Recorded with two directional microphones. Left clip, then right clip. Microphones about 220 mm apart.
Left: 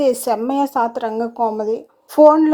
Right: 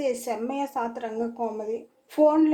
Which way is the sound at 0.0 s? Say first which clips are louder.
Left 11 dB; 35° left (ahead or behind).